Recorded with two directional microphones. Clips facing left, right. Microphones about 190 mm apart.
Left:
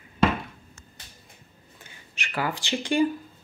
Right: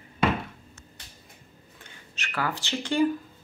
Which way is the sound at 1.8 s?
15° left (ahead or behind).